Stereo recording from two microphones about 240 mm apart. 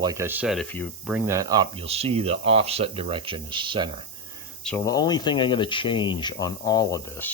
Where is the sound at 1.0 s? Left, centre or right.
Centre.